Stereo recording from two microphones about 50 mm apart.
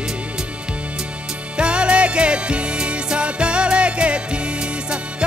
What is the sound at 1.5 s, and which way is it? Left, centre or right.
Music, right.